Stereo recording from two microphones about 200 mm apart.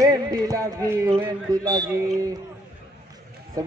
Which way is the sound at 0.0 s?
15° right (ahead or behind).